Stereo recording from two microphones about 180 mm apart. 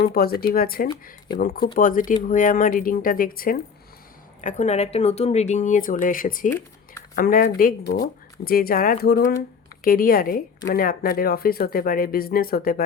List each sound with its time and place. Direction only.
0.1 s speech: 55° left (ahead or behind)
4.4 s speech: 40° left (ahead or behind)